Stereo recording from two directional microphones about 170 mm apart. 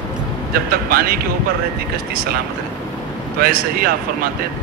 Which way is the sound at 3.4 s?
60° right (ahead or behind).